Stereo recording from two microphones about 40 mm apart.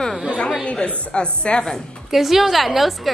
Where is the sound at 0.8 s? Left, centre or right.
Left.